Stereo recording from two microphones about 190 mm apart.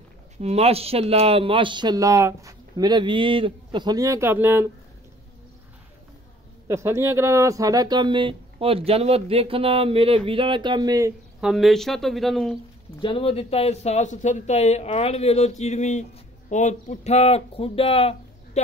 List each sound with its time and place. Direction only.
0.4 s speech: 35° right (ahead or behind); by 4.6 s 15° right (ahead or behind)
6.7 s speech: 15° right (ahead or behind)
11.4 s speech: centre (ahead or behind)
13.0 s a man's voice: 30° left (ahead or behind)